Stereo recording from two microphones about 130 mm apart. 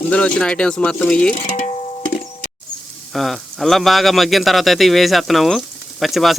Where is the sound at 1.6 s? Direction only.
70° left (ahead or behind).